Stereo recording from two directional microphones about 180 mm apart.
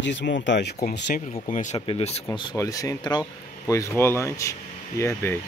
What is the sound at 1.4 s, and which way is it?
Speech, 45° left (ahead or behind).